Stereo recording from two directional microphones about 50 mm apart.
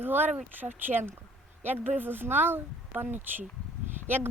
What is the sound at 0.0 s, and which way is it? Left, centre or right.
Speech, right.